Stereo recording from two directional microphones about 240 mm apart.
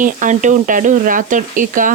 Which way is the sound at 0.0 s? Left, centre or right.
Right.